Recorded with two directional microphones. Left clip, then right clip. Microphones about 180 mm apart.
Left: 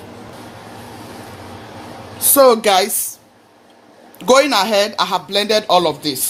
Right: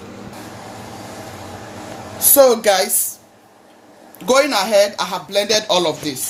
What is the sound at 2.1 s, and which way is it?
Speech, 60° left (ahead or behind).